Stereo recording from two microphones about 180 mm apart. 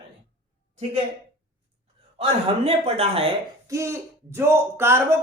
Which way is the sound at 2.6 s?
35° right (ahead or behind).